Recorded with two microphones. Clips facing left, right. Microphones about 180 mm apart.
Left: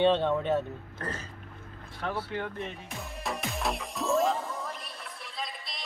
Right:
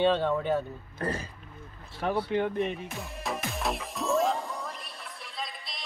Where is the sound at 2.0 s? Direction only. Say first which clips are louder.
Right 6 dB; 15° right (ahead or behind).